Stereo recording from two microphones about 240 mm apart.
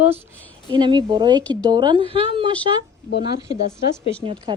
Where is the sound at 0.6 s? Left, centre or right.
Centre.